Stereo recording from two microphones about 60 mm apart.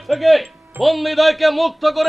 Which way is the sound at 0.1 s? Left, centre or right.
Centre.